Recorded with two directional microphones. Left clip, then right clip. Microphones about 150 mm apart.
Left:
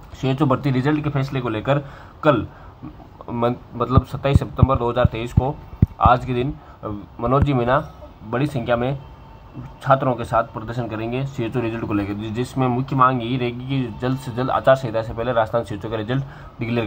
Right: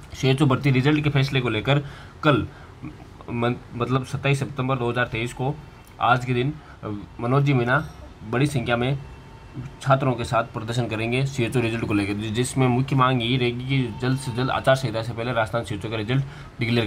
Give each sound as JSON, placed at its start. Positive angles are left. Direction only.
{"t": 0.2, "sound": "a man's voice", "side_deg": -15}
{"t": 10.5, "sound": "a man's voice", "side_deg": -35}